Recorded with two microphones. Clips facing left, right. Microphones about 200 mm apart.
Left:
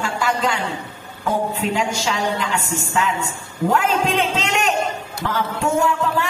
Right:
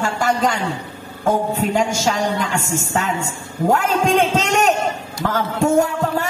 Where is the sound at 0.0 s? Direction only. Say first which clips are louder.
Right 3 dB; 45° right (ahead or behind).